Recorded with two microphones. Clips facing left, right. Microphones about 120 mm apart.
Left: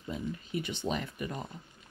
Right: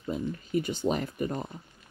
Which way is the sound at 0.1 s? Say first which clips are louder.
Right 6 dB; 40° right (ahead or behind).